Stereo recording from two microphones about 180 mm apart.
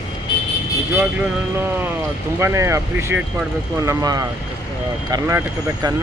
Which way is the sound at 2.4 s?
15° right (ahead or behind).